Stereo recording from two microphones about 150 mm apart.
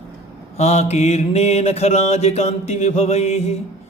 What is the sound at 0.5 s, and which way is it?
Mantra, 45° left (ahead or behind).